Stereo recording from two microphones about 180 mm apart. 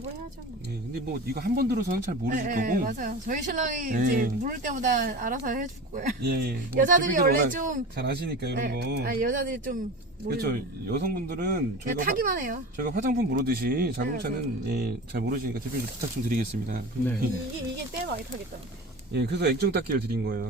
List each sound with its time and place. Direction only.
1.3 s speech: 55° right (ahead or behind)
6.2 s speech: 60° right (ahead or behind)
7.9 s speech: 65° right (ahead or behind); by 16.7 s 50° right (ahead or behind)
19.1 s speech: 65° right (ahead or behind)